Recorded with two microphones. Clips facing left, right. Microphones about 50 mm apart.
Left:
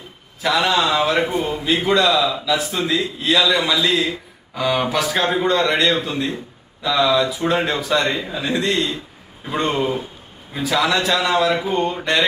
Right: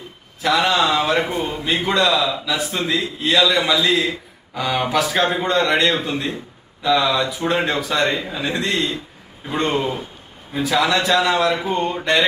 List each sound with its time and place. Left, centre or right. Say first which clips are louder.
0.4 s a man's voice: right 1 dB; centre